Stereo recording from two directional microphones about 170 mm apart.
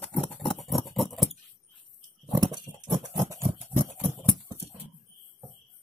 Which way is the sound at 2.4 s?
25° right (ahead or behind).